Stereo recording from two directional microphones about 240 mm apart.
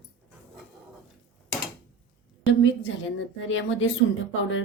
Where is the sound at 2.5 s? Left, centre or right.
Left.